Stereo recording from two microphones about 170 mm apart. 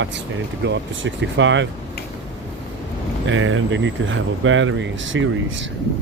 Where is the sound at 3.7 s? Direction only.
90° right.